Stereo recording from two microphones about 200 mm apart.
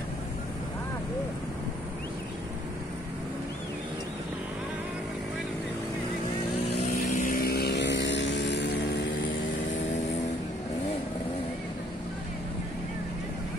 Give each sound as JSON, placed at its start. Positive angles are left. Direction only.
{"t": 7.2, "sound": "vehicle", "side_deg": 45}